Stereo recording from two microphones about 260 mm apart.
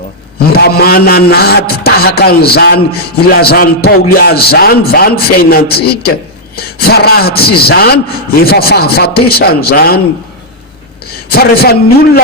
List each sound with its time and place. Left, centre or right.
0.5 s speech: left
11.3 s speech: left